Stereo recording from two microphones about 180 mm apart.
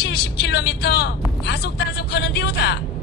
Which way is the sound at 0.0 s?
70° left (ahead or behind).